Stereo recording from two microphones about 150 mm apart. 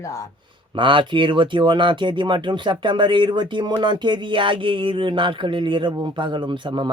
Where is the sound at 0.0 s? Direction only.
20° left (ahead or behind).